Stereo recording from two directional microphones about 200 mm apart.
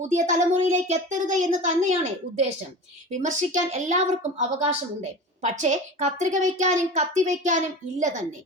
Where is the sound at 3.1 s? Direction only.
40° right (ahead or behind).